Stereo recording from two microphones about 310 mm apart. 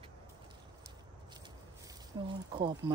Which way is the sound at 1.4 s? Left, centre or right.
Centre.